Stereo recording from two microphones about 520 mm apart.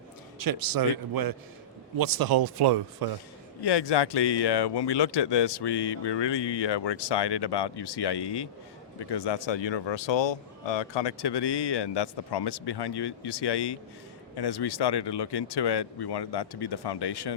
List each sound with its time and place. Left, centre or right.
0.3 s a man's voice: right
3.6 s speech: left